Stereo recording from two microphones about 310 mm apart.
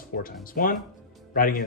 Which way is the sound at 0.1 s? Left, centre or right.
Left.